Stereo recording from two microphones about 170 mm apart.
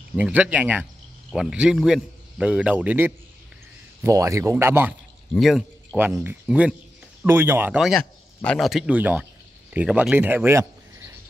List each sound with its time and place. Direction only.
0.1 s a man's voice: 10° right (ahead or behind)
5.3 s speech: 5° left (ahead or behind)
5.9 s a man's voice: 10° right (ahead or behind)